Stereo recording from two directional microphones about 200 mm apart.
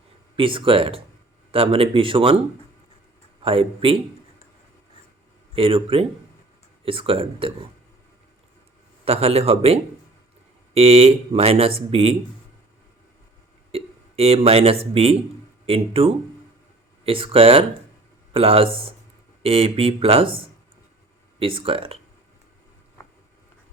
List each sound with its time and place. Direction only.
0.3 s speech: 25° right (ahead or behind)
3.4 s speech: 30° right (ahead or behind)
5.5 s speech: 25° right (ahead or behind)
9.0 s speech: 30° right (ahead or behind)
13.7 s speech: 30° right (ahead or behind)